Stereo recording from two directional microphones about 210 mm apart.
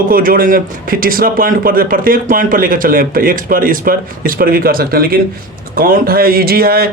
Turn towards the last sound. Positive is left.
turn(degrees=-45)  # may be behind; listen again after turning